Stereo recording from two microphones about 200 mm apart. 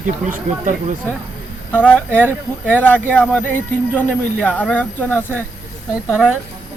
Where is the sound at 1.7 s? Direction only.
10° left (ahead or behind).